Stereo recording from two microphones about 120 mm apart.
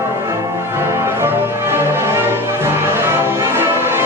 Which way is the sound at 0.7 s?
20° right (ahead or behind).